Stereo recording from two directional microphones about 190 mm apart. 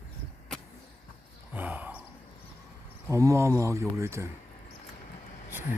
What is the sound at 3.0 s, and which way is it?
Speech, 15° right (ahead or behind).